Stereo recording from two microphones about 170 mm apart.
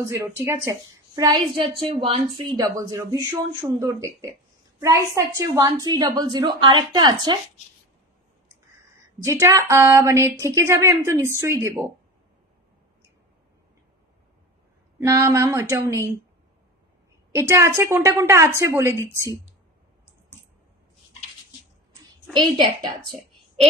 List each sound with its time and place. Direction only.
0.0 s a woman's voice: 15° right (ahead or behind)
9.2 s a woman's voice: 15° right (ahead or behind)
15.0 s a woman's voice: 15° right (ahead or behind)
17.3 s a woman's voice: 15° right (ahead or behind)
22.3 s a woman's voice: 25° right (ahead or behind)